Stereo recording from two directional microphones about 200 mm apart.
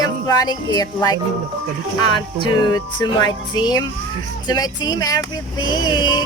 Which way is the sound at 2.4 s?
20° left (ahead or behind).